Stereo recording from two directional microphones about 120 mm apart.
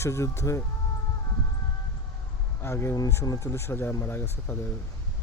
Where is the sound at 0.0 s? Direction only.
25° left (ahead or behind).